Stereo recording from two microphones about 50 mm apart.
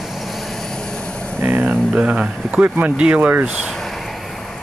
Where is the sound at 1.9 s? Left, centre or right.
Right.